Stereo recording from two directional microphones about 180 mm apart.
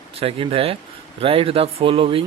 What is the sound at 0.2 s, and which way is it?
A man's voice, 30° right (ahead or behind).